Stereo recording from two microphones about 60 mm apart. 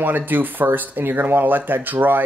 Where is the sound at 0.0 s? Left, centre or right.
Right.